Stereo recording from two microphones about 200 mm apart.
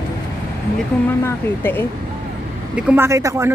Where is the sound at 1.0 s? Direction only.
10° left (ahead or behind).